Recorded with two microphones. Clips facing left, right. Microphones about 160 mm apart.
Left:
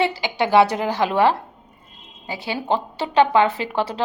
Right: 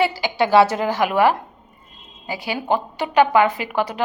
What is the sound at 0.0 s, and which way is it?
A woman's voice, 20° left (ahead or behind).